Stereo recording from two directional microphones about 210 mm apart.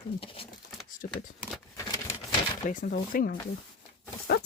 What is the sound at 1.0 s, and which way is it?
Speech, 45° left (ahead or behind).